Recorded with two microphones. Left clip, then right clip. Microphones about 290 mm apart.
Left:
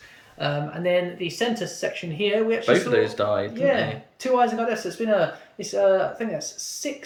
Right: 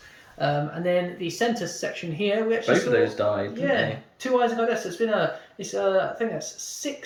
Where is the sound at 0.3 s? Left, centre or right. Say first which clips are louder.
Right 2 dB; centre.